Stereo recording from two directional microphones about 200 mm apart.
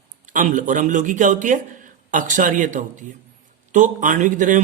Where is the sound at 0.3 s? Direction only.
40° right (ahead or behind).